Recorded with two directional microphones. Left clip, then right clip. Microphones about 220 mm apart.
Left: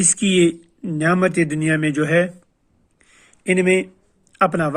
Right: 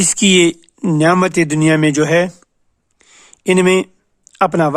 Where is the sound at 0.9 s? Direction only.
35° right (ahead or behind).